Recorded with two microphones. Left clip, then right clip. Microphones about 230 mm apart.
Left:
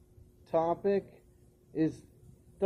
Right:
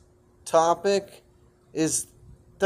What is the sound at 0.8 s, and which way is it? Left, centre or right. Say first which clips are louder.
Speech: right 6 dB; right.